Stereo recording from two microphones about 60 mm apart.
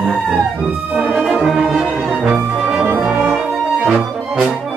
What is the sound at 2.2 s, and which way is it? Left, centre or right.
Music, centre.